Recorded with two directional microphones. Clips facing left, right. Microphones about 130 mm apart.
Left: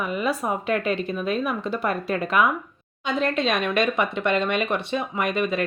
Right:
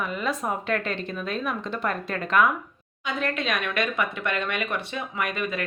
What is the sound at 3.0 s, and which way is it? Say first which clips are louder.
Speech: left 5 dB; 25° left (ahead or behind).